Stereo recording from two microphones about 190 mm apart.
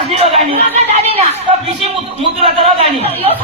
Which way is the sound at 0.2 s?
30° right (ahead or behind).